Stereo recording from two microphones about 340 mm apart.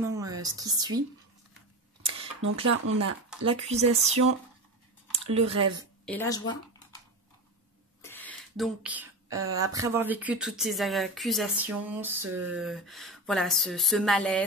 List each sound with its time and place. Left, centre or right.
0.0 s a woman's voice: centre
2.6 s speech: right
3.4 s speech: centre
6.0 s speech: centre
8.0 s a sound: centre
9.5 s speech: centre